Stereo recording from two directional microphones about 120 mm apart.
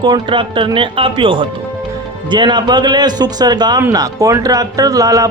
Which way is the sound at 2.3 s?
40° right (ahead or behind).